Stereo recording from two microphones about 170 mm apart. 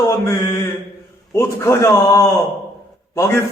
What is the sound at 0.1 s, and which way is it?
Mantra, 15° left (ahead or behind).